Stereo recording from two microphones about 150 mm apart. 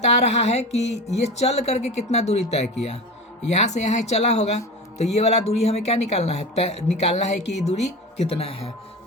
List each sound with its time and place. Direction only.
0.2 s speech: 45° left (ahead or behind)